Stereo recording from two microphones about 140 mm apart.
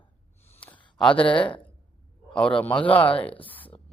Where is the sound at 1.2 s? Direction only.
35° left (ahead or behind).